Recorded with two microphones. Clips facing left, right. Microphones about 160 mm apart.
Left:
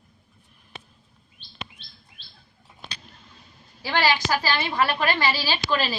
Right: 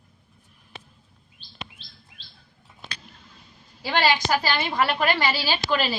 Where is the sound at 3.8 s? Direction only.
15° right (ahead or behind).